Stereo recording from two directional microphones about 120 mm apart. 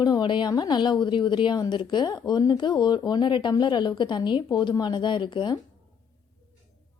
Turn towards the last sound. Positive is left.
turn(degrees=40)  # may be behind; listen again after turning